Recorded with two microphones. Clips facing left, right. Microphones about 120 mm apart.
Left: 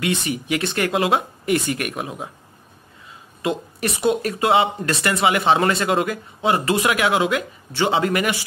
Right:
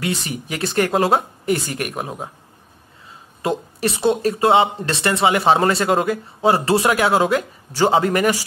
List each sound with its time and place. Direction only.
0.0 s speech: 35° right (ahead or behind)
3.4 s speech: 30° right (ahead or behind)